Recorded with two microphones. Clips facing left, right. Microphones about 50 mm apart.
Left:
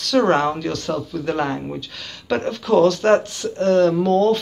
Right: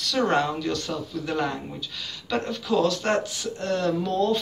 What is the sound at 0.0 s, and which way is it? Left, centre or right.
Speech, left.